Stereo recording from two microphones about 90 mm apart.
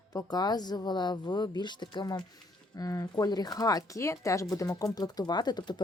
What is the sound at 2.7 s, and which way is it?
Speech, 40° left (ahead or behind).